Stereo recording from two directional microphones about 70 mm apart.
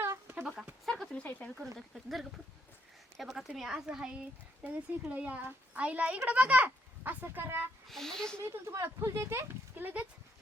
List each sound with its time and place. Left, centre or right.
0.0 s a sound: right
0.4 s a sound: centre
0.9 s a sound: centre
1.1 s speech: left
1.9 s speech: centre
4.6 s a child's voice: right
7.9 s speech: centre
8.4 s speech: right
9.7 s a child's voice: right